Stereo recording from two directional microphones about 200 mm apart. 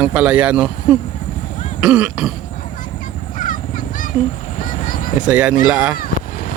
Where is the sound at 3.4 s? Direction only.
40° left (ahead or behind).